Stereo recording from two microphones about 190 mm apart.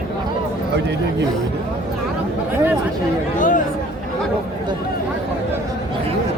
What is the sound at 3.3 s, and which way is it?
Chatter, 45° left (ahead or behind).